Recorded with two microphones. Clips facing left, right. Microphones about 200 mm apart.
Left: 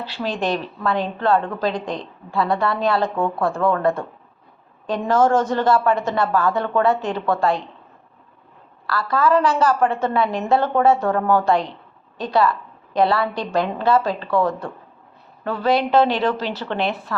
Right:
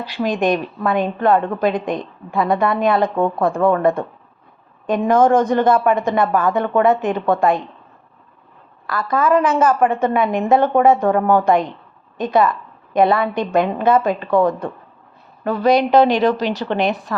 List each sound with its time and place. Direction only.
0.0 s a woman's voice: 15° right (ahead or behind)
8.9 s a woman's voice: 20° right (ahead or behind)